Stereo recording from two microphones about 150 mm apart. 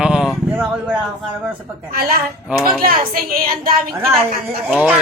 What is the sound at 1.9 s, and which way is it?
Speech, 75° right (ahead or behind).